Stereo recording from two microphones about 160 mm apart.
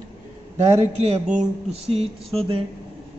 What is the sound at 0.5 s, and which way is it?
Speech, 40° right (ahead or behind).